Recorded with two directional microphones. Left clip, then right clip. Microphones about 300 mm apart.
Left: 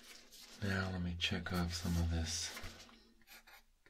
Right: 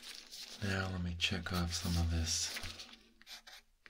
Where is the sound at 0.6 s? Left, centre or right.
Centre.